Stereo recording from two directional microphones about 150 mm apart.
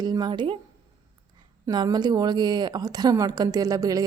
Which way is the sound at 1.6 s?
30° right (ahead or behind).